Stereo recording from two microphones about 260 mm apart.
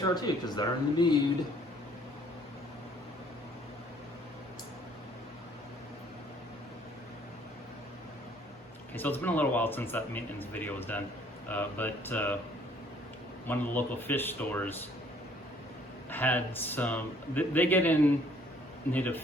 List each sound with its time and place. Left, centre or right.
0.0 s a man's voice: centre
9.0 s a man's voice: centre
13.5 s a man's voice: centre
16.0 s a man's voice: centre